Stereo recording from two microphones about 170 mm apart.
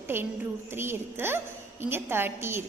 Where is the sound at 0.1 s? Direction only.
15° right (ahead or behind).